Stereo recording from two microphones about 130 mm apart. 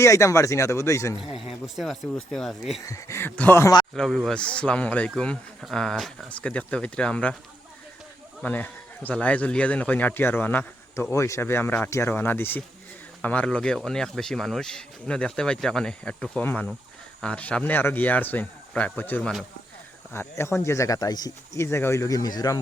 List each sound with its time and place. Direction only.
0.0 s speech: 25° left (ahead or behind)
1.6 s speech: centre (ahead or behind)
2.8 s speech: 25° left (ahead or behind)
3.9 s speech: 5° left (ahead or behind)
8.4 s speech: 15° left (ahead or behind); by 22.6 s 30° left (ahead or behind)